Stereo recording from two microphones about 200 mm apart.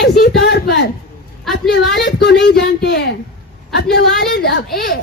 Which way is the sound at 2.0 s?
55° left (ahead or behind).